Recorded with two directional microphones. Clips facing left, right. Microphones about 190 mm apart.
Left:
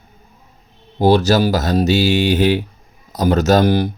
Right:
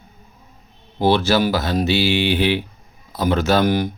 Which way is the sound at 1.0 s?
40° left (ahead or behind).